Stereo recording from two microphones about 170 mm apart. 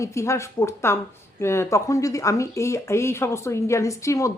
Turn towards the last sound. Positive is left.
turn(degrees=20)  # may be behind; listen again after turning